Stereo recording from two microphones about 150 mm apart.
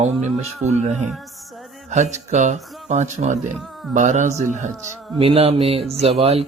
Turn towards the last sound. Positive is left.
turn(degrees=-45)  # may be behind; listen again after turning